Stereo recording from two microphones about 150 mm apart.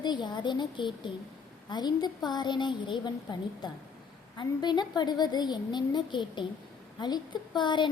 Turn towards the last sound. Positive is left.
turn(degrees=30)  # may be behind; listen again after turning